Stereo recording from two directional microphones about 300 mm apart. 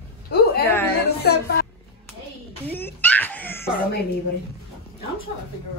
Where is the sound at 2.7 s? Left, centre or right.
Centre.